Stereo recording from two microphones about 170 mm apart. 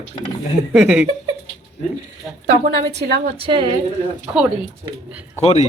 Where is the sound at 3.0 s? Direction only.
70° right (ahead or behind).